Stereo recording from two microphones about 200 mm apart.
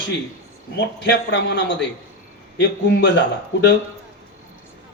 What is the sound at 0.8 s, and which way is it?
A man's voice, 60° left (ahead or behind).